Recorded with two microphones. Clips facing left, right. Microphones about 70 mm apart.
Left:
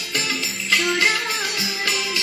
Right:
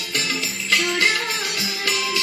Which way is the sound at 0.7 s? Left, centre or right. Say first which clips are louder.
Left 1 dB; centre.